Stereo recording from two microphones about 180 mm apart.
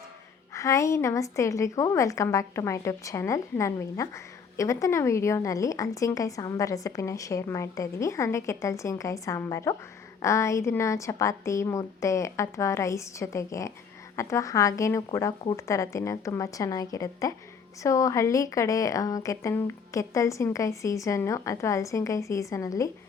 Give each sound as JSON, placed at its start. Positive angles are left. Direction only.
{"t": 0.5, "sound": "a woman's voice", "side_deg": 15}